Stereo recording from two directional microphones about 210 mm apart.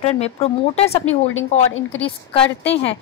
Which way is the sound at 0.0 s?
30° left (ahead or behind).